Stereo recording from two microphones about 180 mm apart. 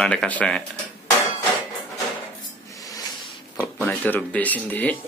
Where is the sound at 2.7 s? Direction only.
20° left (ahead or behind).